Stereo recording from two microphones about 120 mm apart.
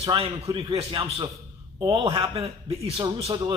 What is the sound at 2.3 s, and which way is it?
Speech, 55° right (ahead or behind).